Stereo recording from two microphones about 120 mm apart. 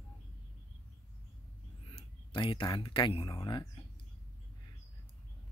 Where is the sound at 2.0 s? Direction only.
45° left (ahead or behind).